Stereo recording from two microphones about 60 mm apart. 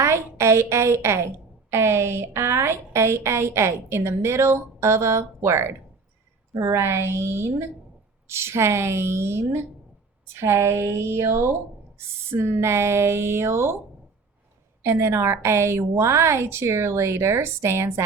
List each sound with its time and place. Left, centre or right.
0.0 s a woman's voice: right
6.5 s a woman's voice: right
6.7 s a woman's voice: right
14.8 s a woman's voice: right